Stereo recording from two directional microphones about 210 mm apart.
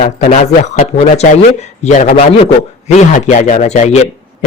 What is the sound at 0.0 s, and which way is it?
A man's voice, 40° left (ahead or behind).